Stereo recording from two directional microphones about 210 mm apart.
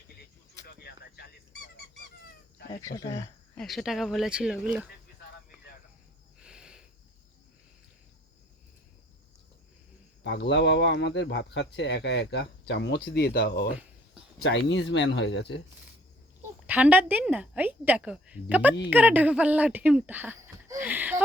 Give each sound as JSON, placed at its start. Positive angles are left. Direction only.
{"t": 2.8, "sound": "speech", "side_deg": 15}
{"t": 3.6, "sound": "speech", "side_deg": 0}
{"t": 6.4, "sound": "a sound", "side_deg": -5}
{"t": 10.2, "sound": "speech", "side_deg": 55}
{"t": 16.6, "sound": "speech", "side_deg": -10}